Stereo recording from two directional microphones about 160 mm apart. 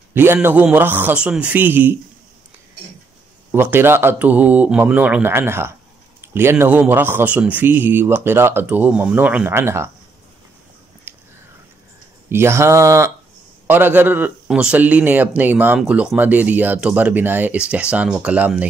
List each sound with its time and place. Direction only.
0.1 s a man's voice: 15° right (ahead or behind)
3.5 s a man's voice: 15° right (ahead or behind)
11.1 s a sound: 10° right (ahead or behind)
12.3 s a man's voice: 15° right (ahead or behind)